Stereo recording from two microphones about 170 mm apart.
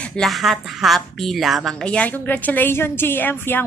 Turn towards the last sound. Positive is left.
turn(degrees=10)  # may be behind; listen again after turning